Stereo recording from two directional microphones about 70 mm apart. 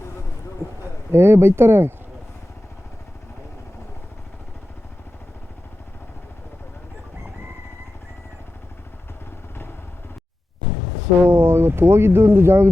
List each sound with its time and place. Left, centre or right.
1.1 s speech: right
11.2 s speech: right